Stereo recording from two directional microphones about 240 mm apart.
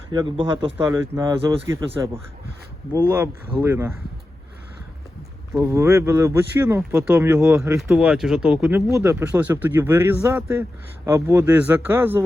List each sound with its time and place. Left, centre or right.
0.1 s a man's voice: centre
3.6 s speech: centre
5.5 s speech: centre